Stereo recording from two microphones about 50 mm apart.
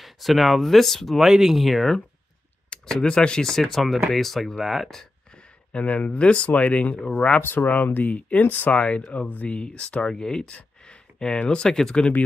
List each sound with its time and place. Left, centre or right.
0.0 s speech: centre
1.2 s speech: centre
2.7 s speech: centre
5.7 s speech: left
10.5 s a sound: centre
11.4 s speech: centre